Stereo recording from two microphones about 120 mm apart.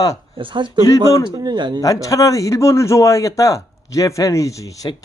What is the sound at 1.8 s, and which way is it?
Speech, 30° left (ahead or behind).